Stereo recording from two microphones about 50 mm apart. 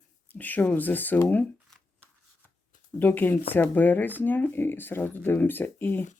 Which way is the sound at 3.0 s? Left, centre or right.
Left.